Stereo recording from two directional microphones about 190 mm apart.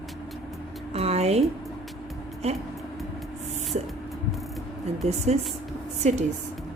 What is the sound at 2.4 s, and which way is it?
Speech, 30° right (ahead or behind).